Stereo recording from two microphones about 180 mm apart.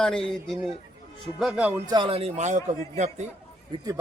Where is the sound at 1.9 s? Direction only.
30° right (ahead or behind).